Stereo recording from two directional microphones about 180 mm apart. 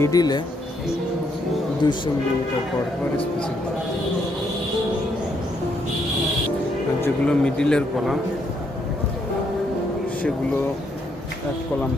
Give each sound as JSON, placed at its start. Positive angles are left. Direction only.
{"t": 0.0, "sound": "speech", "side_deg": 20}
{"t": 1.8, "sound": "speech", "side_deg": 25}
{"t": 7.0, "sound": "a man's voice", "side_deg": 5}